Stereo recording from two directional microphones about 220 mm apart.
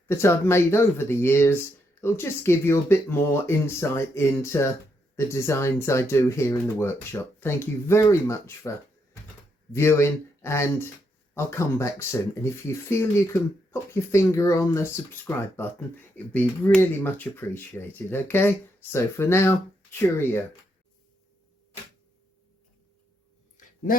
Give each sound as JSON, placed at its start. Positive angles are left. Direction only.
{"t": 0.1, "sound": "speech", "side_deg": 10}
{"t": 9.7, "sound": "speech", "side_deg": 10}
{"t": 23.6, "sound": "a sound", "side_deg": 40}